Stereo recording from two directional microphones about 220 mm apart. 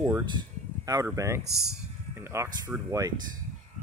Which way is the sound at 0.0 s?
15° right (ahead or behind).